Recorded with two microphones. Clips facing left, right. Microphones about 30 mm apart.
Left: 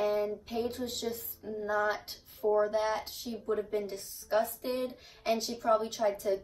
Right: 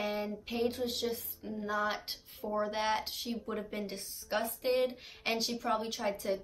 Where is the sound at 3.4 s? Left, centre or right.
Right.